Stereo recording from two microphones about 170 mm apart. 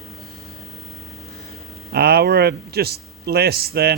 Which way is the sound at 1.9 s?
70° right (ahead or behind).